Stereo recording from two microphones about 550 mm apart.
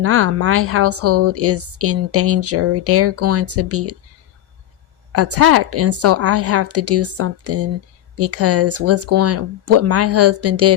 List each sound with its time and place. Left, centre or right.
0.0 s a woman's voice: right
5.1 s a woman's voice: right